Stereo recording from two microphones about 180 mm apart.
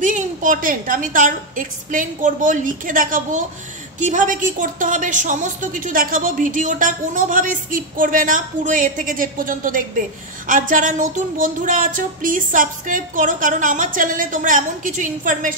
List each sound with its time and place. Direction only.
0.0 s a woman's voice: 45° right (ahead or behind)